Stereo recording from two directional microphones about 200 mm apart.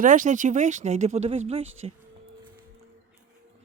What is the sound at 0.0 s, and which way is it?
Speech, 40° right (ahead or behind).